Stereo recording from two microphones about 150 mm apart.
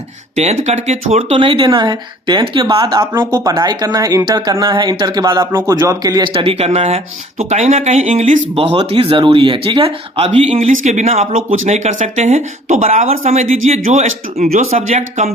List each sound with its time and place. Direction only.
0.3 s speech: 45° right (ahead or behind)